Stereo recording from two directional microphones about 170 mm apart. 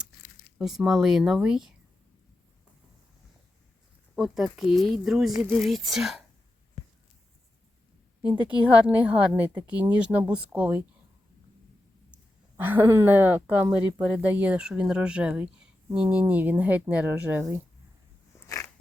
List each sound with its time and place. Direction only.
0.6 s speech: centre (ahead or behind)
4.1 s speech: centre (ahead or behind)
8.2 s a woman's voice: 30° right (ahead or behind)
9.0 s speech: 10° right (ahead or behind)
12.1 s speech: 10° right (ahead or behind)
18.4 s a sound: 20° left (ahead or behind)